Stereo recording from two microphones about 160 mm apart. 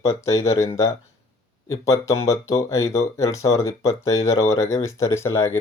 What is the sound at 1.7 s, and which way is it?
Speech, 20° left (ahead or behind).